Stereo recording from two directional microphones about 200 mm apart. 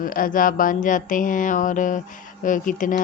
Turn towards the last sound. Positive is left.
turn(degrees=40)  # may be behind; listen again after turning